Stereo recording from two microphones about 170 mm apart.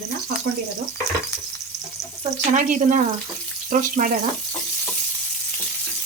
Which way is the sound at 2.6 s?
50° right (ahead or behind).